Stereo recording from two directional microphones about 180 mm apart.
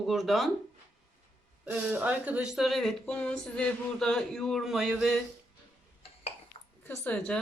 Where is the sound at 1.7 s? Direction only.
10° right (ahead or behind).